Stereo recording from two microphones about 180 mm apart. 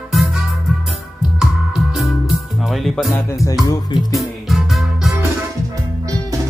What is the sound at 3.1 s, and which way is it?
Music, 20° left (ahead or behind).